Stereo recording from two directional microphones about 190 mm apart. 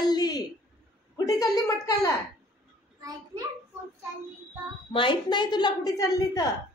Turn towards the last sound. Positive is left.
turn(degrees=20)  # may be behind; listen again after turning